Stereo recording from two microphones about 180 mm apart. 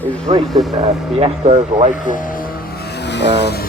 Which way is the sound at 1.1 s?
30° right (ahead or behind).